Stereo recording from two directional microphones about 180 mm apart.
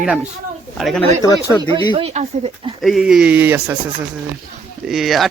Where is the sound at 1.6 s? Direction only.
30° right (ahead or behind).